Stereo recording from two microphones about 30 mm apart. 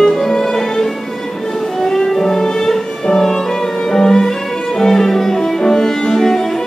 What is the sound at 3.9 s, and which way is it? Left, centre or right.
Violin, centre.